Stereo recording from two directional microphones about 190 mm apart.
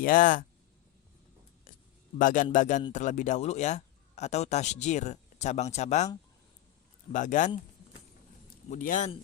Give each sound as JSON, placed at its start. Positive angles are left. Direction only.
{"t": 0.0, "sound": "a man's voice", "side_deg": 45}
{"t": 2.1, "sound": "a man's voice", "side_deg": 45}
{"t": 7.1, "sound": "speech", "side_deg": 40}
{"t": 8.7, "sound": "a man's voice", "side_deg": 40}